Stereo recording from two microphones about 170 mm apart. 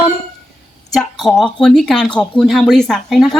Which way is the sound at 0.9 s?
Centre (ahead or behind).